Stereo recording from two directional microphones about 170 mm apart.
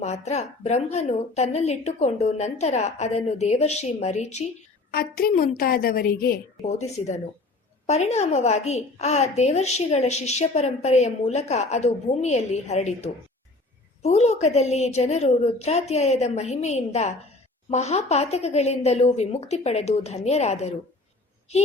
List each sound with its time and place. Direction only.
0.0 s a woman's voice: 40° left (ahead or behind)
4.9 s a woman's voice: 60° left (ahead or behind)
6.6 s a woman's voice: 40° left (ahead or behind)